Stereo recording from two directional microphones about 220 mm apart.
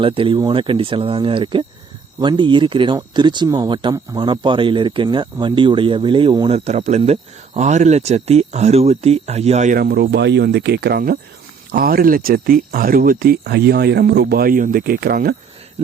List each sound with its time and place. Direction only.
0.0 s speech: 25° right (ahead or behind)
6.7 s speech: 30° right (ahead or behind)